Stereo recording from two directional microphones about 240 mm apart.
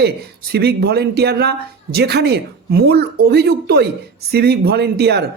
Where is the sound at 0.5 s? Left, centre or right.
Right.